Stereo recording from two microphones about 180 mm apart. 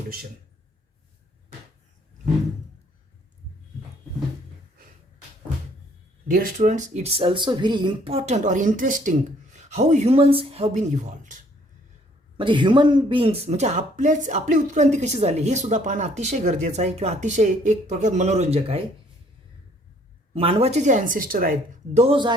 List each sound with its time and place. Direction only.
6.2 s a woman's voice: 50° right (ahead or behind)
12.4 s a woman's voice: 25° right (ahead or behind)
20.3 s a woman's voice: 30° right (ahead or behind)